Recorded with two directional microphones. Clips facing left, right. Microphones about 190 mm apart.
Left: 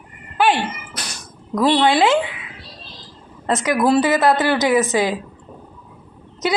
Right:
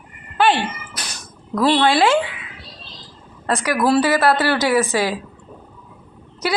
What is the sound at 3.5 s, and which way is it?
A woman's voice, 20° left (ahead or behind).